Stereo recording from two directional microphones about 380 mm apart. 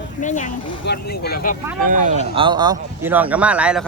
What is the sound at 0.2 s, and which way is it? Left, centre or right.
Speech, centre.